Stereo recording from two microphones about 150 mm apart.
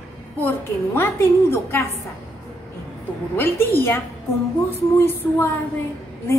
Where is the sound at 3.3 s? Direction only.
15° left (ahead or behind).